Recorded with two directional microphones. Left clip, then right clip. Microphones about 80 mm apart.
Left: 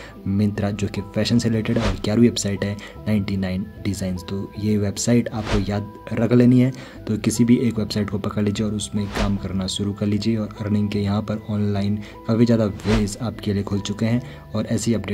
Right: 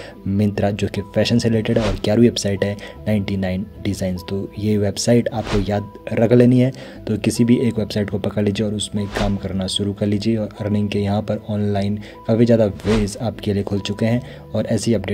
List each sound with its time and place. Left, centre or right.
0.4 s speech: right